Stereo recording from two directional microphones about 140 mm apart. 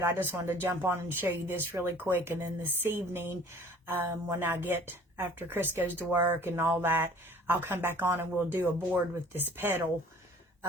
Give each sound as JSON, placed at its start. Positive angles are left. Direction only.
{"t": 0.0, "sound": "speech", "side_deg": -15}